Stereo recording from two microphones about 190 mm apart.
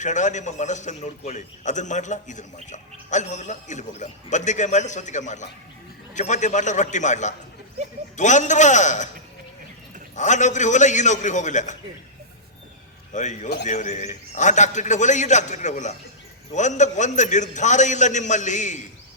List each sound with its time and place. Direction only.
0.0 s a man's voice: 40° left (ahead or behind)
10.2 s a man's voice: 40° left (ahead or behind)
13.1 s a man's voice: 40° left (ahead or behind)